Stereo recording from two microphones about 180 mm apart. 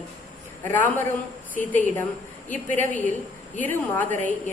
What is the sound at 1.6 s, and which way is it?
Speech, 45° left (ahead or behind).